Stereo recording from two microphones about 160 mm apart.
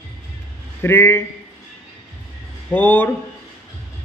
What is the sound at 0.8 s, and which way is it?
Speech, 15° left (ahead or behind).